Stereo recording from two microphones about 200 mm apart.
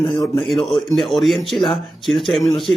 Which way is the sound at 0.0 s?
25° left (ahead or behind).